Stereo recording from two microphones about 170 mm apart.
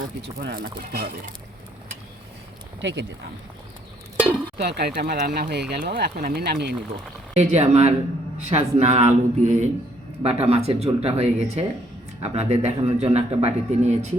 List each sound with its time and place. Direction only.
0.3 s speech: 70° right (ahead or behind)
2.8 s speech: 90° right
4.5 s speech: 75° right (ahead or behind)
7.3 s a man's voice: 40° right (ahead or behind)